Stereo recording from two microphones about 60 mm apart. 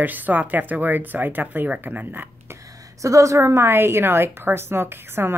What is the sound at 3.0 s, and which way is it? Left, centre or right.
A woman's voice, right.